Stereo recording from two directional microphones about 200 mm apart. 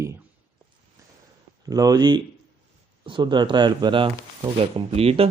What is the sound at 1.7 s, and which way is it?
Speech, 20° right (ahead or behind).